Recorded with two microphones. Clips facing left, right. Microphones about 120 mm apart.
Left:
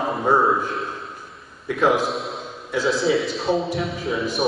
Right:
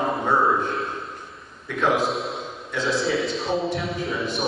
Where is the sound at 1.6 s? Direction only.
5° left (ahead or behind).